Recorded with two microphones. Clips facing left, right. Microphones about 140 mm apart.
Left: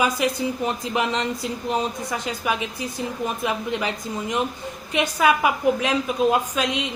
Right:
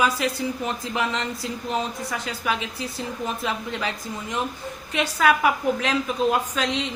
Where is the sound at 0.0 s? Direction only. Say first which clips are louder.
Left 1 dB; 15° left (ahead or behind).